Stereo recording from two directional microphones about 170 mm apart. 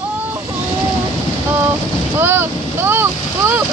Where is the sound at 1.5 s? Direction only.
10° right (ahead or behind).